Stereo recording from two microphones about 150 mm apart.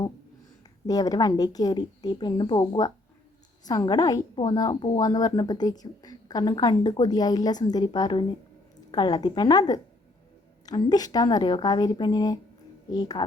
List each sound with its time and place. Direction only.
0.9 s a woman's voice: 25° left (ahead or behind)